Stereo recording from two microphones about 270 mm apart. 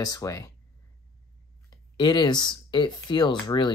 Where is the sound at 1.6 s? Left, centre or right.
Centre.